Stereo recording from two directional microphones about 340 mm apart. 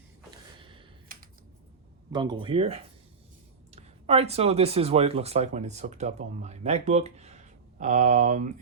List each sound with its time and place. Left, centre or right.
0.6 s computer keyboard: centre
1.1 s typing: right
2.1 s speech: centre